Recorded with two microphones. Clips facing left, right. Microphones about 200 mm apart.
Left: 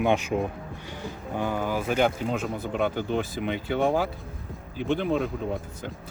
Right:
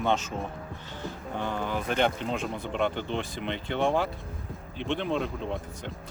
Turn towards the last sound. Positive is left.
turn(degrees=5)  # may be behind; listen again after turning